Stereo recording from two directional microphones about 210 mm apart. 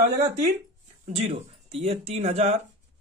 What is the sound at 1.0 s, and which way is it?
Speech, 30° right (ahead or behind).